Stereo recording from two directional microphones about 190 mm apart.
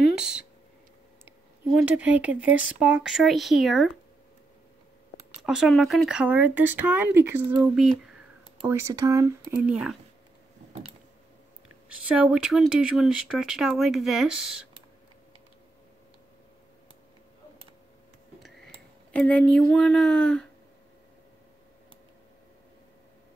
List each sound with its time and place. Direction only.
0.0 s a sound: 5° right (ahead or behind)
1.7 s speech: 5° right (ahead or behind)
5.4 s speech: centre (ahead or behind)
8.6 s speech: 15° right (ahead or behind)
9.7 s speech: 5° right (ahead or behind)
11.9 s speech: 5° right (ahead or behind)
19.1 s speech: 5° left (ahead or behind)